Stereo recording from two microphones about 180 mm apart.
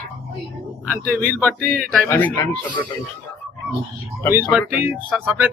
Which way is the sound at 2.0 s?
15° left (ahead or behind).